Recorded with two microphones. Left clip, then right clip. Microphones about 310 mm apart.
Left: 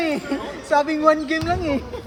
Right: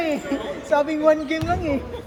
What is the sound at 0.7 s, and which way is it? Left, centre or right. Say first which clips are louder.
A woman's voice: left 1 dB; left.